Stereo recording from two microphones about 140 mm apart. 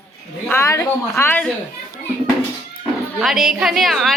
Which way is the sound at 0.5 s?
20° left (ahead or behind).